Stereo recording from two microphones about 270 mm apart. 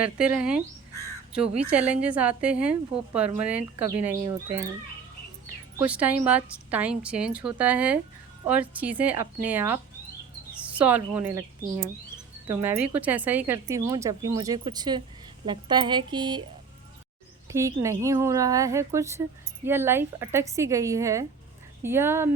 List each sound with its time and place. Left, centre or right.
0.0 s a woman's voice: centre
1.6 s a woman's voice: centre
5.9 s a woman's voice: centre
17.5 s speech: centre